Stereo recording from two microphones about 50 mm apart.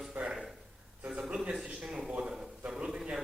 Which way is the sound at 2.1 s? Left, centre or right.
Centre.